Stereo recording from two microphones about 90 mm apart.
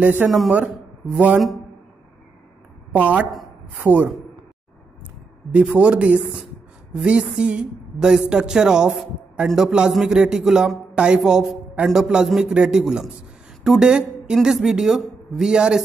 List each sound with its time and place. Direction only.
0.0 s a man's voice: 20° right (ahead or behind)
2.9 s a woman's voice: 15° right (ahead or behind)
5.5 s a man's voice: 15° right (ahead or behind)